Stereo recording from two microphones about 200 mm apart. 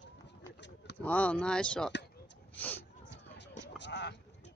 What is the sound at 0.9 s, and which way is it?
Speech, 5° left (ahead or behind).